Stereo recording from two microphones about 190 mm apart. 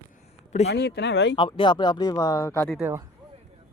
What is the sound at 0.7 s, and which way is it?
Speech, 60° left (ahead or behind).